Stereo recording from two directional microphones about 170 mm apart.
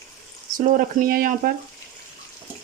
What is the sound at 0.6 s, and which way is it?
Speech, 55° right (ahead or behind).